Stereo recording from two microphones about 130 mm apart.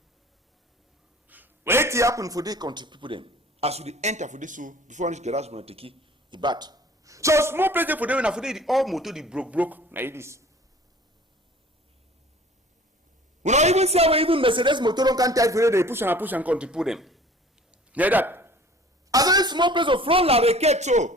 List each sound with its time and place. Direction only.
1.3 s a man's voice: 15° right (ahead or behind)
13.4 s a man's voice: 60° right (ahead or behind); by 17.2 s centre (ahead or behind)
17.7 s a sound: 10° right (ahead or behind)
19.1 s speech: 30° right (ahead or behind); by 21.2 s 65° right (ahead or behind)